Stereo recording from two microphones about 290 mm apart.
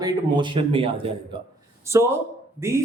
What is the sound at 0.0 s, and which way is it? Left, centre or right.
Speech, centre.